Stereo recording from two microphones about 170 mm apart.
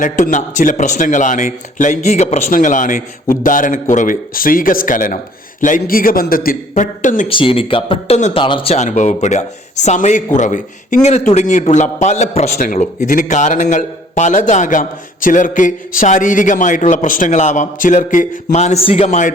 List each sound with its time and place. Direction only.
0.0 s speech: 50° left (ahead or behind)
7.3 s speech: 30° left (ahead or behind)
12.5 s speech: 50° left (ahead or behind)